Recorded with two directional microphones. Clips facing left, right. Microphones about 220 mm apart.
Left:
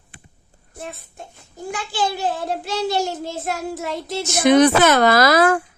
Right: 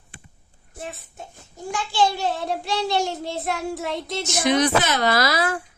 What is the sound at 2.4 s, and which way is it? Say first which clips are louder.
Speech: left 2 dB; 50° left (ahead or behind).